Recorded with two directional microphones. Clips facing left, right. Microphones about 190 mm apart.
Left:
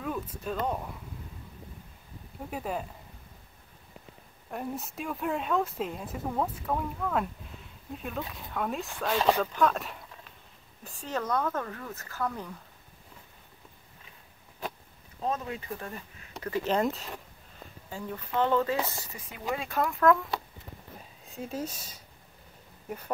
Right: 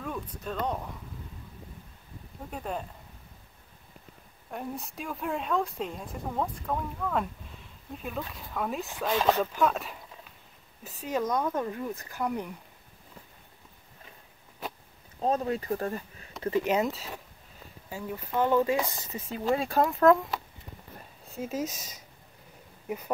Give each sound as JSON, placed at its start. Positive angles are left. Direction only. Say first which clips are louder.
{"t": 0.0, "sound": "speech", "louder": "left 2 dB", "side_deg": 5}
{"t": 2.5, "sound": "speech", "louder": "left 1 dB", "side_deg": 5}
{"t": 4.5, "sound": "speech", "louder": "left 1 dB", "side_deg": 0}
{"t": 9.4, "sound": "speech", "louder": "even", "side_deg": -5}
{"t": 15.2, "sound": "speech", "louder": "right 5 dB", "side_deg": -35}
{"t": 16.6, "sound": "speech", "louder": "even", "side_deg": -5}
{"t": 21.3, "sound": "speech", "louder": "right 3 dB", "side_deg": -5}
{"t": 22.8, "sound": "speech", "louder": "right 3 dB", "side_deg": -10}